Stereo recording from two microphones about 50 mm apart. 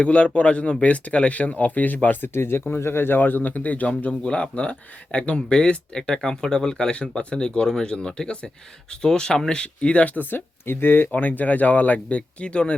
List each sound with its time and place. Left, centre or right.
0.0 s speech: left
2.3 s speech: left
4.1 s speech: centre
10.2 s speech: left